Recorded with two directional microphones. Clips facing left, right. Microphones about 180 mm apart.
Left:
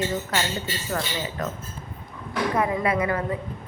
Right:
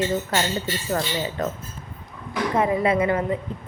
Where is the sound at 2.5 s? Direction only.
25° right (ahead or behind).